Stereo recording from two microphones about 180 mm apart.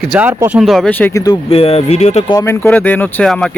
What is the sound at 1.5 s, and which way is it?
Speech, 35° left (ahead or behind).